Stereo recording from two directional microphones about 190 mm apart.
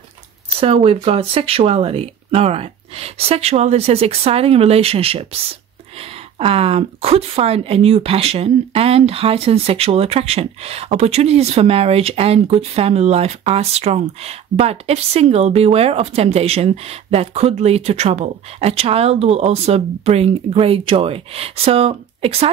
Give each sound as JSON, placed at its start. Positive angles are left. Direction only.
{"t": 0.6, "sound": "speech", "side_deg": -30}
{"t": 6.3, "sound": "speech", "side_deg": -30}